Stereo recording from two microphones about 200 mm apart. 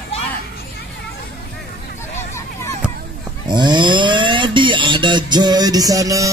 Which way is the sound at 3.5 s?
20° right (ahead or behind).